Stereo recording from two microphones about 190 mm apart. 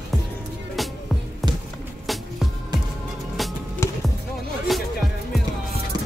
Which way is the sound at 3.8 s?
15° left (ahead or behind).